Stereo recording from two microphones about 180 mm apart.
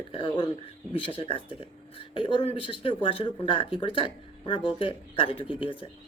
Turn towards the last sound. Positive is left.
turn(degrees=30)  # may be behind; listen again after turning